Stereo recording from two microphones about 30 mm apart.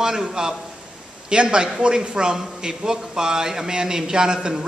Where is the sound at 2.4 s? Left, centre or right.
Centre.